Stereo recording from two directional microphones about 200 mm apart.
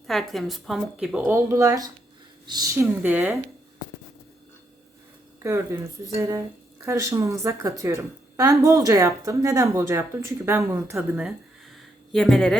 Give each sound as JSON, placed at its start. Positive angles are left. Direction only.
{"t": 0.1, "sound": "a woman's voice", "side_deg": 0}
{"t": 5.4, "sound": "a woman's voice", "side_deg": -15}
{"t": 10.9, "sound": "a woman's voice", "side_deg": 0}